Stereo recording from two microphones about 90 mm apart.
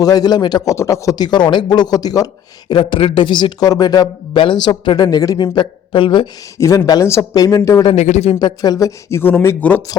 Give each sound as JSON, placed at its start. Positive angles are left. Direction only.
{"t": 0.0, "sound": "speech", "side_deg": 50}
{"t": 0.7, "sound": "speech", "side_deg": 35}
{"t": 1.1, "sound": "speech", "side_deg": 55}
{"t": 3.7, "sound": "speech", "side_deg": 45}
{"t": 5.5, "sound": "speech", "side_deg": 65}
{"t": 6.6, "sound": "speech", "side_deg": 40}
{"t": 9.0, "sound": "speech", "side_deg": 25}